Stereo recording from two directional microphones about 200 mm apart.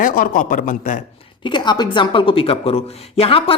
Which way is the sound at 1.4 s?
20° left (ahead or behind).